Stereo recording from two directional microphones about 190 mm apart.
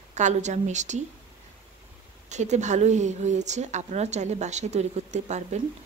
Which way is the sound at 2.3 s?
40° right (ahead or behind).